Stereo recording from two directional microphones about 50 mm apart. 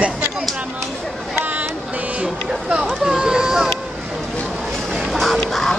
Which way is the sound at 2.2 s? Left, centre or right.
Right.